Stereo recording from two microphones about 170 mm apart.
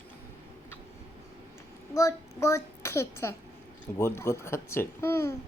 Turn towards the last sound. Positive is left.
turn(degrees=15)  # may be behind; listen again after turning